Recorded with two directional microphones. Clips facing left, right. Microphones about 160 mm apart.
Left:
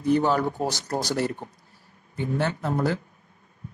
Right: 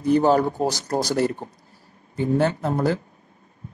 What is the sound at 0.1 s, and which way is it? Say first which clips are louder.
Speech: right 4 dB; 35° right (ahead or behind).